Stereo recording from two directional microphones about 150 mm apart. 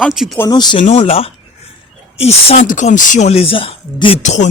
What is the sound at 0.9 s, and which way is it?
Speech, 40° left (ahead or behind).